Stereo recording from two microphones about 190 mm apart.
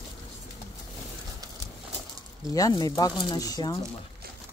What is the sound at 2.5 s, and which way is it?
Speech, 20° left (ahead or behind).